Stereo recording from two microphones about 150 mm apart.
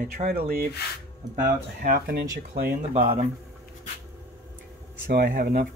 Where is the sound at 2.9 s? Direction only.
40° right (ahead or behind).